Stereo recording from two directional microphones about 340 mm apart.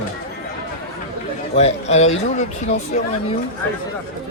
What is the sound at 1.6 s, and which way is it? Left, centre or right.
A man's voice, centre.